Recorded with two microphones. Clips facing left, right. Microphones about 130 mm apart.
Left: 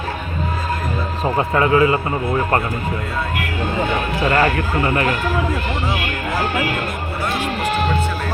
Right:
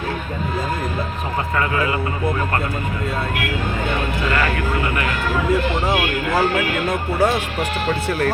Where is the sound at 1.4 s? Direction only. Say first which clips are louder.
Left 6 dB; 25° left (ahead or behind).